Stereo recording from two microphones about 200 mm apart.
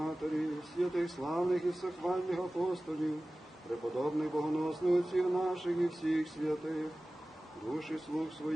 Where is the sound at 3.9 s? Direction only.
Centre (ahead or behind).